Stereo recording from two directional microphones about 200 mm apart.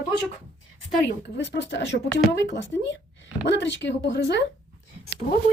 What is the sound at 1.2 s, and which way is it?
Speech, 60° left (ahead or behind).